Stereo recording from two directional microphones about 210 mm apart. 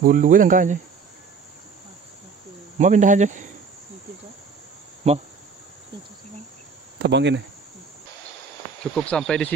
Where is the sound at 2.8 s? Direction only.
35° right (ahead or behind).